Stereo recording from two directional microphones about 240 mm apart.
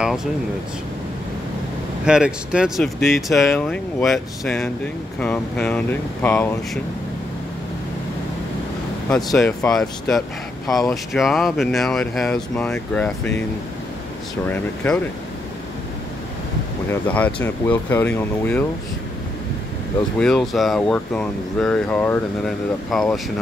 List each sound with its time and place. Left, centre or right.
0.0 s speech: centre
2.0 s speech: centre
9.1 s speech: centre
14.5 s speech: centre
16.9 s speech: centre
20.2 s speech: centre